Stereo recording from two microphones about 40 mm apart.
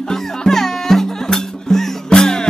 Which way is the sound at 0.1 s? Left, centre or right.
Centre.